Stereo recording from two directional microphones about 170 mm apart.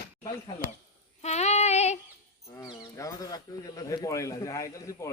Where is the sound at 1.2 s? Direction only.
40° left (ahead or behind).